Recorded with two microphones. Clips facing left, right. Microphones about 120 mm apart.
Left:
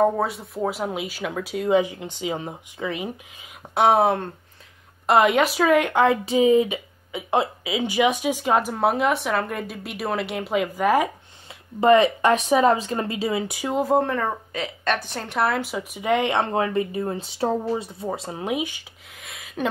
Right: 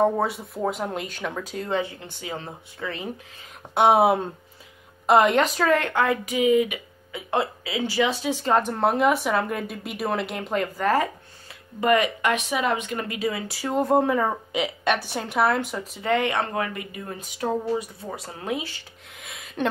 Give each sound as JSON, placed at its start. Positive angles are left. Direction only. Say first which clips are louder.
{"t": 0.0, "sound": "speech", "louder": "left 1 dB", "side_deg": 0}
{"t": 3.7, "sound": "speech", "louder": "even", "side_deg": 0}
{"t": 11.8, "sound": "speech", "louder": "left 5 dB", "side_deg": 30}
{"t": 13.7, "sound": "speech", "louder": "right 1 dB", "side_deg": 0}
{"t": 19.1, "sound": "speech", "louder": "right 1 dB", "side_deg": 0}